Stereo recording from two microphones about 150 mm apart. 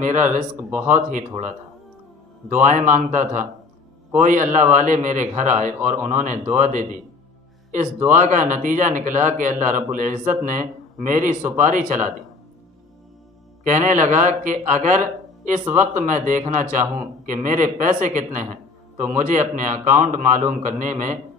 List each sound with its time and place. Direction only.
0.0 s speech: 55° right (ahead or behind)
0.6 s speech: 10° right (ahead or behind)
0.8 s speech: 50° right (ahead or behind)
8.1 s speech: 55° right (ahead or behind)
13.7 s speech: 55° right (ahead or behind)